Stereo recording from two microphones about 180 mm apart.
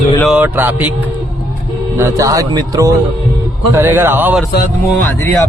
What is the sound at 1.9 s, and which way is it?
A man's voice, 15° right (ahead or behind).